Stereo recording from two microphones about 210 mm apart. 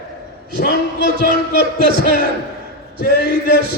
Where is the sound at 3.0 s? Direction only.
50° left (ahead or behind).